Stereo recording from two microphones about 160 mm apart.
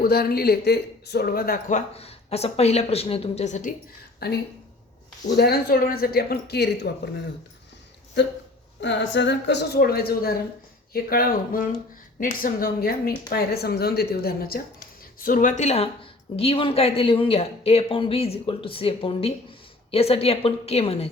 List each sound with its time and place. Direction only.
0.0 s speech: 75° left (ahead or behind); by 3.8 s 50° left (ahead or behind)
4.2 s speech: 80° left
5.4 s speech: 75° left (ahead or behind); by 7.1 s 90° left
8.9 s speech: 90° left; by 14.6 s 70° left (ahead or behind)
15.2 s speech: 55° left (ahead or behind); by 21.1 s 40° left (ahead or behind)